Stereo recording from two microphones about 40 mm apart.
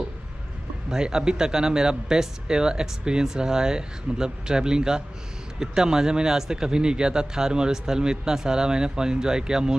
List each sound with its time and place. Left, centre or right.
0.8 s a man's voice: centre